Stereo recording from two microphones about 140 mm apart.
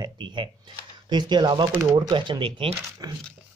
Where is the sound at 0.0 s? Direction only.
35° right (ahead or behind).